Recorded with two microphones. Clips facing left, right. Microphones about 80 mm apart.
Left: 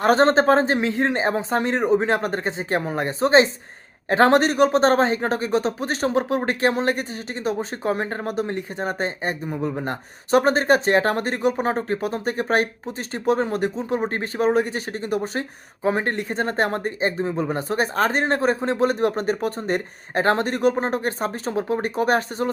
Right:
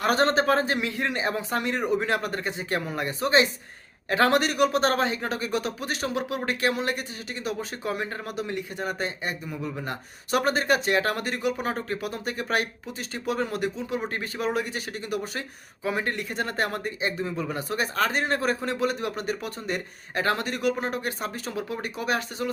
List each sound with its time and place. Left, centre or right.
0.0 s a man's voice: left